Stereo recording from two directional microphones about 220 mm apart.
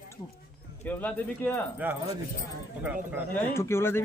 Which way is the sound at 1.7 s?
10° right (ahead or behind).